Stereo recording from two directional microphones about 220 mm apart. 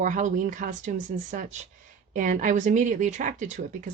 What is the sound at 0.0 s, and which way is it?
Speech, 35° right (ahead or behind).